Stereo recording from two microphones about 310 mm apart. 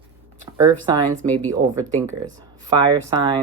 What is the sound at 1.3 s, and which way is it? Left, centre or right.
Speech, centre.